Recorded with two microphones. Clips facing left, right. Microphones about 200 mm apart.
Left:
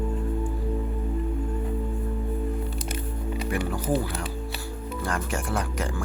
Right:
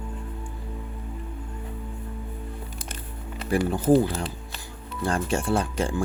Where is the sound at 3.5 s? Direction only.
30° right (ahead or behind).